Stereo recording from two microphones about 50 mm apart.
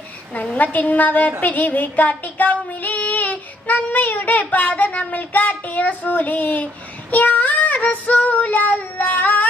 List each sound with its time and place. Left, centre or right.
0.5 s a woman's voice: left
1.4 s child singing: left